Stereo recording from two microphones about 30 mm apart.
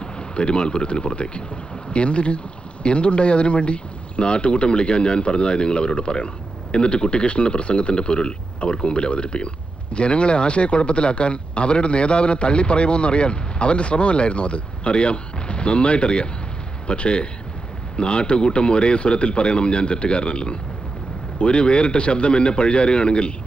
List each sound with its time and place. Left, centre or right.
0.0 s a man's voice: left